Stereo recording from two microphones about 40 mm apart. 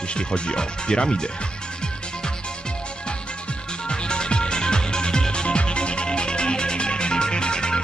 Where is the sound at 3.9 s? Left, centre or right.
Left.